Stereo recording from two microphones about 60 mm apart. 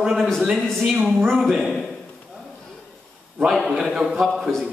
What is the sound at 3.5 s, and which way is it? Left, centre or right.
Speech, centre.